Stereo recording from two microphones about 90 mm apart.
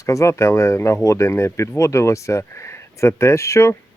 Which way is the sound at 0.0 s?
35° left (ahead or behind).